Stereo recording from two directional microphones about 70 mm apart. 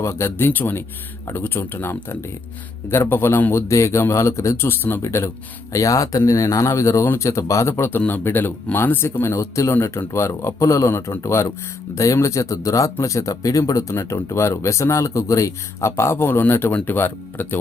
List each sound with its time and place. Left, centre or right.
0.0 s speech: left
4.6 s speech: left
5.0 s speech: left
5.7 s speech: left
7.7 s speech: left